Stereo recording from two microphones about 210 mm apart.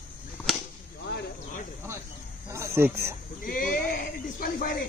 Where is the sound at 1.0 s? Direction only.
50° left (ahead or behind).